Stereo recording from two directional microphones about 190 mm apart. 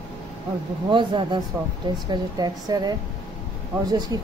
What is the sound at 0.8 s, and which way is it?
Speech, 25° right (ahead or behind).